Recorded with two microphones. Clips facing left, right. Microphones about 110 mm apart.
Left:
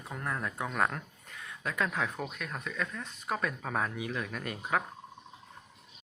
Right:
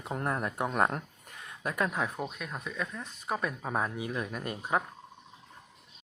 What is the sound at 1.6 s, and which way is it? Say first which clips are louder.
Speech: right 1 dB; 10° right (ahead or behind).